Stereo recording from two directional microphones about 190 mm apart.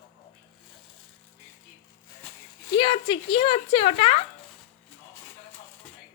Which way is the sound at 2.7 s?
25° left (ahead or behind).